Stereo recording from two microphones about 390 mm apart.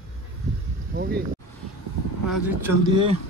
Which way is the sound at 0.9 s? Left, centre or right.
Right.